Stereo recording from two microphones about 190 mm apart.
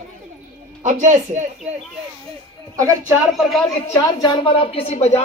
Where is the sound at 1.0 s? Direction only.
40° right (ahead or behind).